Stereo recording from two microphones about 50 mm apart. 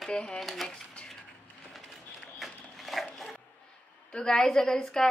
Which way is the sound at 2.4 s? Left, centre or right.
Centre.